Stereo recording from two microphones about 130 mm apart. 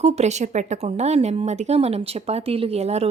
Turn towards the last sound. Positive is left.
turn(degrees=-55)  # may be behind; listen again after turning